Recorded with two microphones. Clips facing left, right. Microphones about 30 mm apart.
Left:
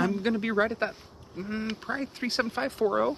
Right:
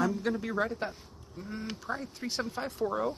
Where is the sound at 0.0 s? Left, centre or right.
Left.